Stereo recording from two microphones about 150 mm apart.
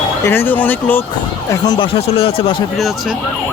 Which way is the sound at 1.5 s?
30° left (ahead or behind).